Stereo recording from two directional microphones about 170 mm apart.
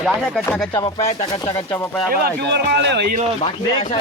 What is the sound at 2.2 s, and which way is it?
Speech, 80° right.